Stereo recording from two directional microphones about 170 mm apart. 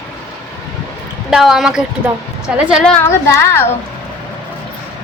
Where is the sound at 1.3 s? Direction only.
Centre (ahead or behind).